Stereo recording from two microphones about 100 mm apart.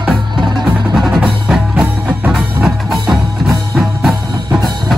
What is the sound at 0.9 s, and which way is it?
Music, 5° right (ahead or behind).